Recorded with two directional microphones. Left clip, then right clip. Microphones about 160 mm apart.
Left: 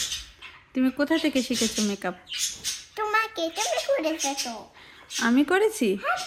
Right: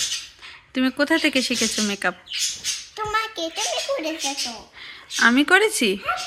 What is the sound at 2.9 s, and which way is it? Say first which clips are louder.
Child singing: left 1 dB; 20° left (ahead or behind).